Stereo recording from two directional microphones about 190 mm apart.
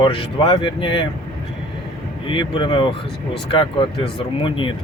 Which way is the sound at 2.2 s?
25° left (ahead or behind).